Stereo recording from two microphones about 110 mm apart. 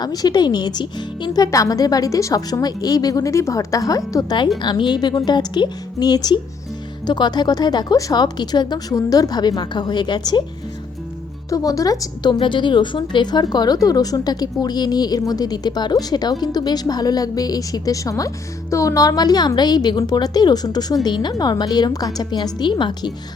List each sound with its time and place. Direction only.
0.0 s a woman's voice: 35° left (ahead or behind)
11.4 s a woman's voice: 30° left (ahead or behind)